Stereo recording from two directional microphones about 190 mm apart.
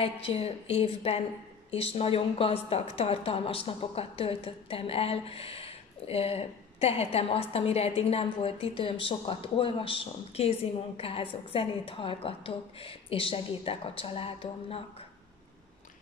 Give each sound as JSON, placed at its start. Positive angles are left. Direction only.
{"t": 0.0, "sound": "a woman's voice", "side_deg": 30}